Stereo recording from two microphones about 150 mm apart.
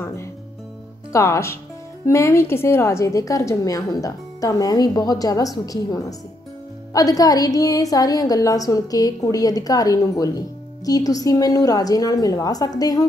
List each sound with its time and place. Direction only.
1.1 s a woman's voice: 20° left (ahead or behind)